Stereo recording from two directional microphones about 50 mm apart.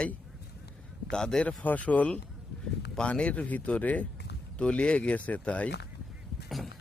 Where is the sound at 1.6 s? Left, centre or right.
Left.